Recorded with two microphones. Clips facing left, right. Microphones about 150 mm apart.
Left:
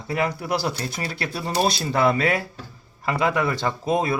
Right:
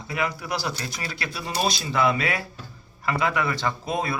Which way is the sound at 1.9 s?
45° left (ahead or behind).